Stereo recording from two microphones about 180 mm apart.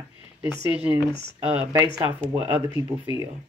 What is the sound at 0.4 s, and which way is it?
Speech, 10° right (ahead or behind).